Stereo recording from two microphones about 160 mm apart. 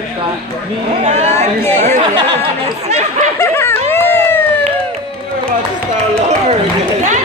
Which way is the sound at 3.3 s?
15° left (ahead or behind).